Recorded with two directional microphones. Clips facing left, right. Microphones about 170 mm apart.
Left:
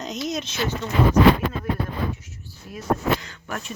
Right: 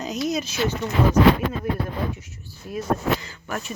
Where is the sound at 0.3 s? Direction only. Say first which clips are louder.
Right 2 dB; 10° right (ahead or behind).